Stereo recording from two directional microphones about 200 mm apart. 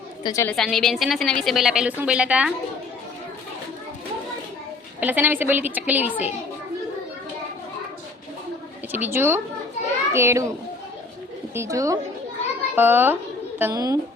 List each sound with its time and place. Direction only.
0.2 s a woman's voice: 20° left (ahead or behind)
0.4 s a woman's voice: centre (ahead or behind)
4.9 s a woman's voice: 10° right (ahead or behind)
8.9 s a woman's voice: 10° right (ahead or behind)
11.5 s a woman's voice: 15° right (ahead or behind)